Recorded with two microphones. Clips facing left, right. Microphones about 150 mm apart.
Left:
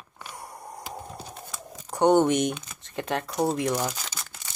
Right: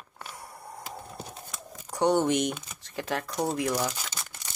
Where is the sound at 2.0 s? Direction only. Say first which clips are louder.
Left 4 dB; 55° left (ahead or behind).